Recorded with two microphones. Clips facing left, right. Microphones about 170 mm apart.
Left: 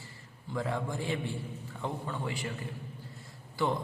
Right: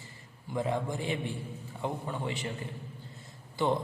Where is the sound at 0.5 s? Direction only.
20° right (ahead or behind).